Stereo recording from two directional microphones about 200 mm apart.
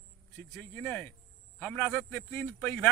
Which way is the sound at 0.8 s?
10° left (ahead or behind).